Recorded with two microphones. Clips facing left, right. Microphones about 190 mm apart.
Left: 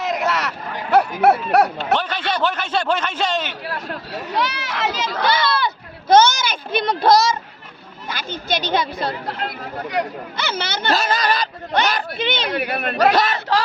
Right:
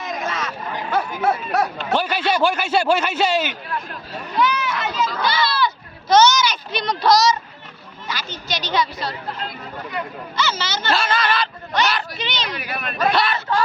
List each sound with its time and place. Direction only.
0.0 s a sound: 70° left (ahead or behind)
2.0 s speech: 10° right (ahead or behind)
3.7 s speech: 70° left (ahead or behind); by 9.1 s 55° left (ahead or behind)
9.2 s speech: 75° left (ahead or behind); by 10.9 s 60° left (ahead or behind)
10.9 s speech: 40° left (ahead or behind); by 13.1 s 65° left (ahead or behind)
13.5 s a sound: 80° left